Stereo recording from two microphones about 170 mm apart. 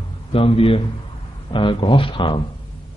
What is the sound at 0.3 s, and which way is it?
Speech, 35° left (ahead or behind).